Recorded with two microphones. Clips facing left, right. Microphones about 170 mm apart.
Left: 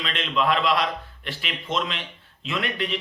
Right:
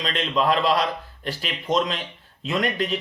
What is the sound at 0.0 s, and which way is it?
Speech, 35° right (ahead or behind).